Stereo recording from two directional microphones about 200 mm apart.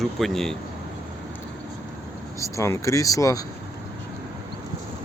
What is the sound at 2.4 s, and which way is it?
Speech, 15° left (ahead or behind).